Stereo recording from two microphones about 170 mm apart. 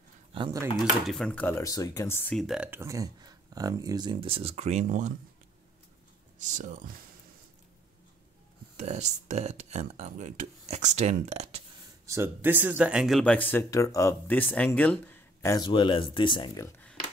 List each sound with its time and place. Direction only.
0.3 s speech: 25° right (ahead or behind)
1.0 s speech: 5° left (ahead or behind)
2.3 s speech: centre (ahead or behind); by 5.1 s 50° right (ahead or behind)
6.4 s speech: 50° right (ahead or behind)
8.7 s speech: 40° right (ahead or behind)
12.1 s speech: 15° right (ahead or behind)
13.2 s speech: 10° left (ahead or behind)
15.6 s speech: 30° left (ahead or behind)